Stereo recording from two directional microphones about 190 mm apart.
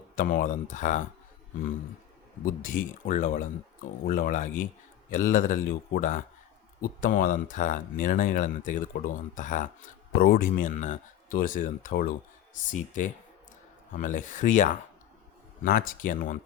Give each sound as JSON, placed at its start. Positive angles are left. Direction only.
{"t": 0.2, "sound": "speech", "side_deg": 45}
{"t": 2.4, "sound": "speech", "side_deg": 45}
{"t": 13.9, "sound": "speech", "side_deg": 45}